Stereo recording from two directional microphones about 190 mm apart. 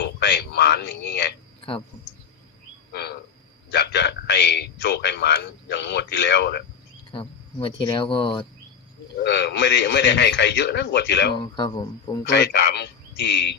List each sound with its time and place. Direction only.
0.0 s a man's voice: 65° left (ahead or behind)
2.9 s frog: 60° left (ahead or behind)
3.7 s a man's voice: 65° left (ahead or behind)
7.1 s speech: 25° left (ahead or behind)
9.2 s a man's voice: 65° left (ahead or behind)
11.3 s speech: 25° left (ahead or behind)
12.2 s a man's voice: 65° left (ahead or behind)